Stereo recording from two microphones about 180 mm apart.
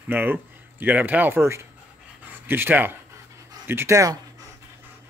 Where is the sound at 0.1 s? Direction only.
10° right (ahead or behind).